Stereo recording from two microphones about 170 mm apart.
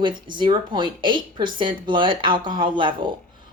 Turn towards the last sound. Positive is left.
turn(degrees=-30)  # may be behind; listen again after turning